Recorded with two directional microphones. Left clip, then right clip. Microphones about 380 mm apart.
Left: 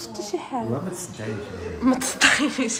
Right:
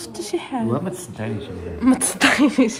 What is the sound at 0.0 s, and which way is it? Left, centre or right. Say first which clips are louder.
Speech: right 3 dB; right.